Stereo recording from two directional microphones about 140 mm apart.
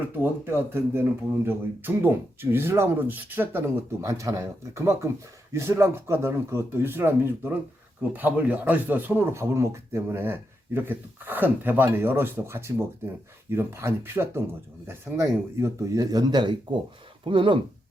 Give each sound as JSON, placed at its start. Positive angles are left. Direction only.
{"t": 0.2, "sound": "speech", "side_deg": -15}